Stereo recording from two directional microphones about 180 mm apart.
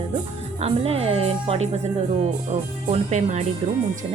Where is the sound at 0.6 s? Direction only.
35° right (ahead or behind).